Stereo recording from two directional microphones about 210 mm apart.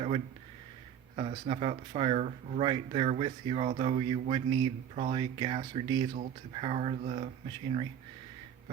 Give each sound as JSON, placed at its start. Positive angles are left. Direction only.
{"t": 1.1, "sound": "speech", "side_deg": -25}